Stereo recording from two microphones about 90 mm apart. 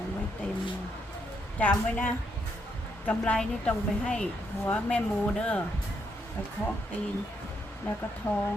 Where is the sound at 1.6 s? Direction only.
20° left (ahead or behind).